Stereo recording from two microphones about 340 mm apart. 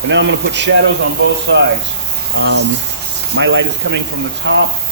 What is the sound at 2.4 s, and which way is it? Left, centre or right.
Speech, right.